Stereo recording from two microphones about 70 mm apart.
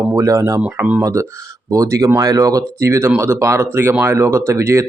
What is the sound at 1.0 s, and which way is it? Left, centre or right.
Speech, right.